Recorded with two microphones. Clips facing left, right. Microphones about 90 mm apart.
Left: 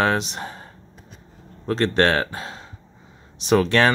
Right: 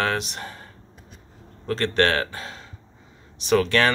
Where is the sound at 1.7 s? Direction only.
20° left (ahead or behind).